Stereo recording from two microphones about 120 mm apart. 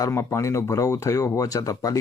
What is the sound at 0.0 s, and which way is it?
Speech, 20° left (ahead or behind).